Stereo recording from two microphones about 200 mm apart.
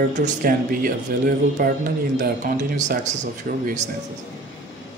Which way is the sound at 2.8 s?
35° right (ahead or behind).